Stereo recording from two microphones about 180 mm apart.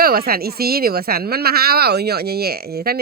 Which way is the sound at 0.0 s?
55° right (ahead or behind).